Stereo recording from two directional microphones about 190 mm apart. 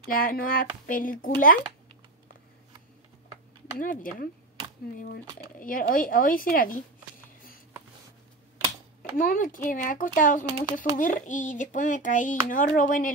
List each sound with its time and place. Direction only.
0.1 s speech: 50° left (ahead or behind)
3.7 s speech: 45° left (ahead or behind)
9.2 s speech: 45° left (ahead or behind)